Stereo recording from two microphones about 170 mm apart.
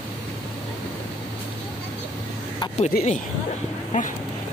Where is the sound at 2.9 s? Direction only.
60° left (ahead or behind).